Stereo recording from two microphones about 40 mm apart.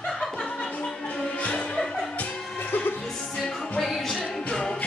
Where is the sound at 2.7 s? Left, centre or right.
Left.